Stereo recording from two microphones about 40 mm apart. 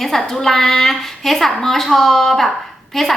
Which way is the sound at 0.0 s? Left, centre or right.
Centre.